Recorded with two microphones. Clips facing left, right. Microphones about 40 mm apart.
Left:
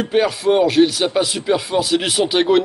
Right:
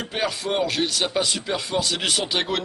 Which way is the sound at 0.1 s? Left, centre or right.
Centre.